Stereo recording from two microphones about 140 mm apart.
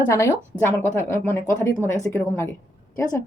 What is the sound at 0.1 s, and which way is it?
A woman's voice, 15° left (ahead or behind).